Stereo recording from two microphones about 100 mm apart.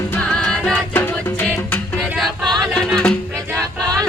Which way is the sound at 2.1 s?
Centre (ahead or behind).